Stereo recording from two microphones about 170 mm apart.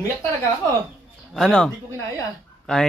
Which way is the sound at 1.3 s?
5° left (ahead or behind).